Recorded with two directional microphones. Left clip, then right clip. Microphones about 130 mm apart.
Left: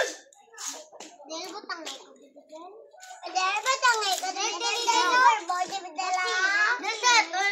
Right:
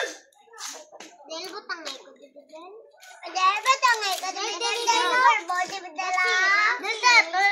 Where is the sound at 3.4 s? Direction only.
10° left (ahead or behind).